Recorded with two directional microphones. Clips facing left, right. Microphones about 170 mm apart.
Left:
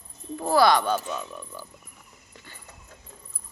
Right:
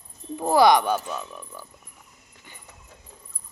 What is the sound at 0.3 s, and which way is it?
Speech, 20° right (ahead or behind).